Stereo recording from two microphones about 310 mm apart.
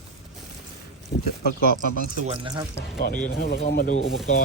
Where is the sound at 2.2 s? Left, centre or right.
Centre.